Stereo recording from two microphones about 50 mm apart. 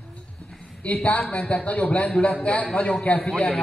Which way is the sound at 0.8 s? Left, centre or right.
Left.